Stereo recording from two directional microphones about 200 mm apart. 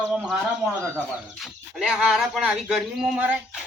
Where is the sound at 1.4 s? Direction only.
Centre (ahead or behind).